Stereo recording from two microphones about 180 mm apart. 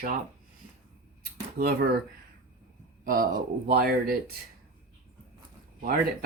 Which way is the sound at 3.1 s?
50° right (ahead or behind).